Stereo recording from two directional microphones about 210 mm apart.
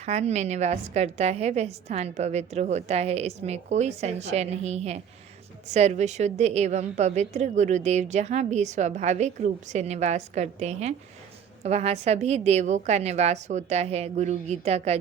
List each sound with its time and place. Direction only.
0.0 s a woman's voice: 30° right (ahead or behind)